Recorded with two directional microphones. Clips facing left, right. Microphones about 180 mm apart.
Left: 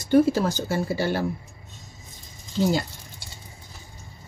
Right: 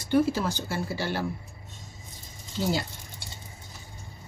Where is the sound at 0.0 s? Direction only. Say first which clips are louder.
Left 5 dB; 40° left (ahead or behind).